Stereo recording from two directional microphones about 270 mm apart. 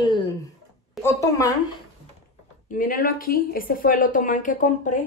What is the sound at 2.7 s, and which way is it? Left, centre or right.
A woman's voice, left.